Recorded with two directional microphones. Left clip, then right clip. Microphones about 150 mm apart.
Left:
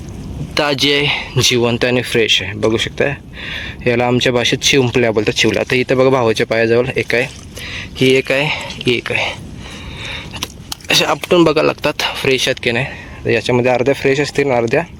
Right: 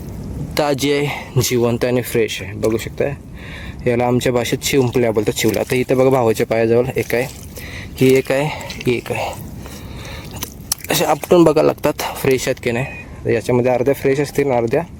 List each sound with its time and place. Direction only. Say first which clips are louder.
0.5 s speech: left 3 dB; 20° right (ahead or behind)
10.1 s speech: left 6 dB; 25° right (ahead or behind); by 14.8 s 5° right (ahead or behind)